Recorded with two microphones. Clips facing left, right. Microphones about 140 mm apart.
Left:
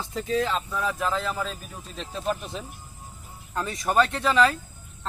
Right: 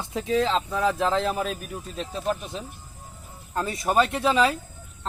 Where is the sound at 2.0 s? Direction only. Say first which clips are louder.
Right 1 dB; 5° right (ahead or behind).